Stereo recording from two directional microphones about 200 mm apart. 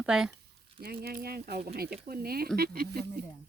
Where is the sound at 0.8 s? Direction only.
50° right (ahead or behind).